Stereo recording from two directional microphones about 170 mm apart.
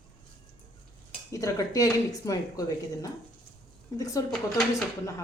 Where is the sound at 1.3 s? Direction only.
20° left (ahead or behind).